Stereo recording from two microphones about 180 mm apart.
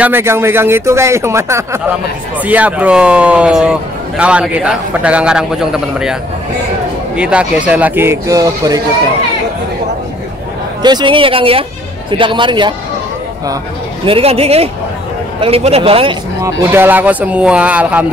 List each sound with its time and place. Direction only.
0.0 s a man's voice: 15° right (ahead or behind)
7.2 s speech: 5° right (ahead or behind)
10.8 s speech: 25° right (ahead or behind)
14.0 s a man's voice: 30° right (ahead or behind)
16.3 s speech: 15° right (ahead or behind)